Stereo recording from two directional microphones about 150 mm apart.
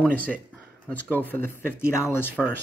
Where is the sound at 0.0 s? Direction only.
10° left (ahead or behind).